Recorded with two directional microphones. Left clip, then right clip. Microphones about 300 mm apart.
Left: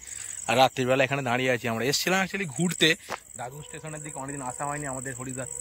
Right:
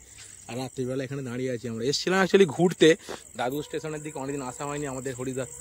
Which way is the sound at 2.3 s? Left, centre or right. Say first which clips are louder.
Right 11 dB; right.